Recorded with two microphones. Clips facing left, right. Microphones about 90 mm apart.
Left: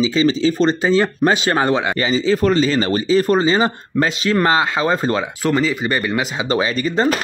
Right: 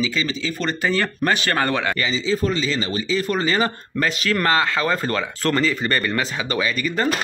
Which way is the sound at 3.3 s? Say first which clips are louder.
Left 5 dB; 20° left (ahead or behind).